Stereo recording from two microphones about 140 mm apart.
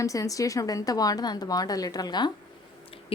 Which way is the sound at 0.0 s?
25° left (ahead or behind).